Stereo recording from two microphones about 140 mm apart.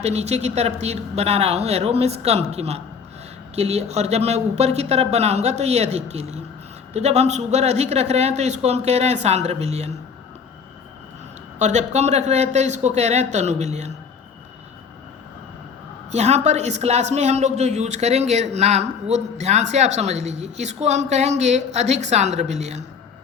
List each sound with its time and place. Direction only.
0.0 s speech: 50° right (ahead or behind)
11.6 s speech: 55° right (ahead or behind)
16.1 s speech: 55° right (ahead or behind)